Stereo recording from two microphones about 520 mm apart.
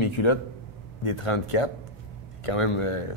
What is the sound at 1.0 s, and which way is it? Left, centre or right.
Speech, left.